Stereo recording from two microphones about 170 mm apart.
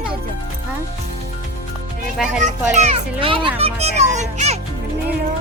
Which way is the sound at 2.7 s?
40° right (ahead or behind).